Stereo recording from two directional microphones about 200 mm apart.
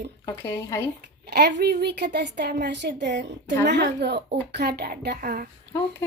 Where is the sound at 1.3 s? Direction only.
55° right (ahead or behind).